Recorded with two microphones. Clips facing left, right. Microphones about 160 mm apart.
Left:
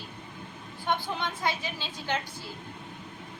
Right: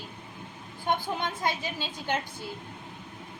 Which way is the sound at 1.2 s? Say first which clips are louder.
Right 1 dB; 45° right (ahead or behind).